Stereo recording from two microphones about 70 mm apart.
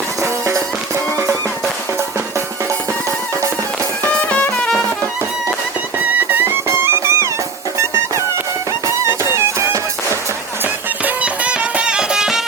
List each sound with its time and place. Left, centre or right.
0.2 s music: right
4.3 s music: centre
6.1 s music: right
6.7 s music: right
8.9 s music: right
11.0 s music: centre